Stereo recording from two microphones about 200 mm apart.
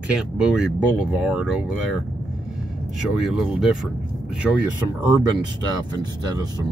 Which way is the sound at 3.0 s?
Centre (ahead or behind).